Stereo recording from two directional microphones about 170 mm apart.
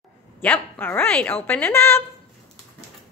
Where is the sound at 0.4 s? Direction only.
10° left (ahead or behind).